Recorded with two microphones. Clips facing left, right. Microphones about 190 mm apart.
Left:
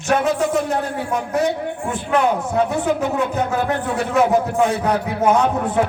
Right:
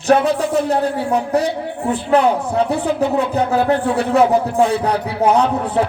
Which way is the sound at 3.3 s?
35° right (ahead or behind).